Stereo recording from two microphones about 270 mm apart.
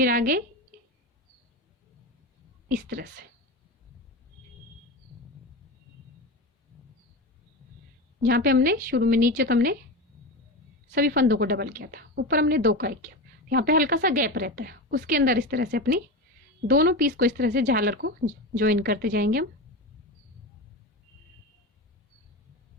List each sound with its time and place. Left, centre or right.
0.0 s a woman's voice: right
2.6 s a woman's voice: right
8.2 s a woman's voice: right
10.9 s a woman's voice: right